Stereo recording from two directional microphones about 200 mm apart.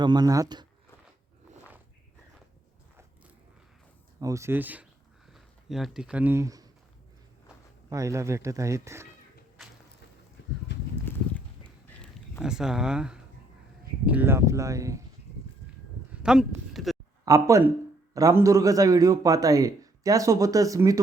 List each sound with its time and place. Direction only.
0.0 s speech: 20° right (ahead or behind)
4.2 s a man's voice: 15° right (ahead or behind)
7.9 s a man's voice: 15° right (ahead or behind)
10.7 s horse: 60° left (ahead or behind)
11.0 s clip-clop: 10° left (ahead or behind)
12.4 s a man's voice: 5° right (ahead or behind)
16.2 s speech: 5° right (ahead or behind)
16.7 s a sound: centre (ahead or behind)
17.2 s a man's voice: 15° right (ahead or behind)